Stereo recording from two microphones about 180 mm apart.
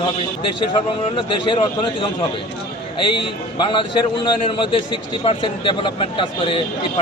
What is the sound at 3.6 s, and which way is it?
A man's voice, 25° left (ahead or behind).